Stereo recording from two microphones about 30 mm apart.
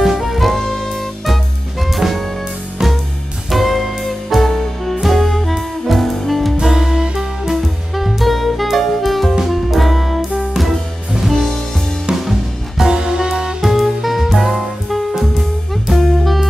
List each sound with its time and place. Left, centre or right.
0.0 s saxophone: centre
0.6 s music: centre
2.8 s music: right
3.4 s music: centre
6.6 s music: centre
7.6 s music: centre
12.2 s music: centre
12.8 s music: right
13.6 s music: centre